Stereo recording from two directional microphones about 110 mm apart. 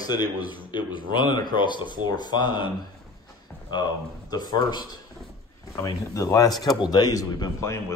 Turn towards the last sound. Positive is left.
turn(degrees=25)  # may be behind; listen again after turning